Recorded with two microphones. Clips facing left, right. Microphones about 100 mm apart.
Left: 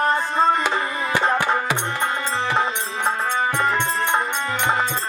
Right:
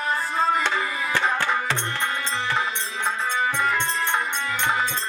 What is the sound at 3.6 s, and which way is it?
Music, 30° left (ahead or behind).